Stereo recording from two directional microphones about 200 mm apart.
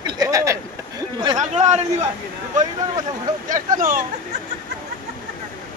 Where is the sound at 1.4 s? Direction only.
35° right (ahead or behind).